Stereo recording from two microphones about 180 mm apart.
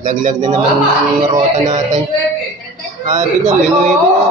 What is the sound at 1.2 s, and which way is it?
Speech, 20° right (ahead or behind).